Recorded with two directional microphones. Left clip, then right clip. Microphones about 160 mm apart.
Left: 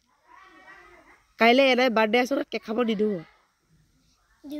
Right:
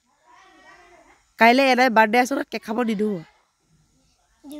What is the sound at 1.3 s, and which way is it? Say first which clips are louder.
Speech: right 3 dB; 50° right (ahead or behind).